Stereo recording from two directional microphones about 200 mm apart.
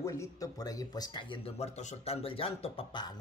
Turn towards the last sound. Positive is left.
turn(degrees=20)  # may be behind; listen again after turning